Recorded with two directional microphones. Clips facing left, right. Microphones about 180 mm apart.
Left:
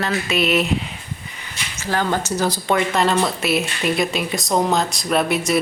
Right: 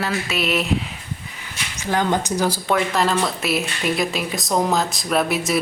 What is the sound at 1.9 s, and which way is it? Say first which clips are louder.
Speech: right 1 dB; 15° right (ahead or behind).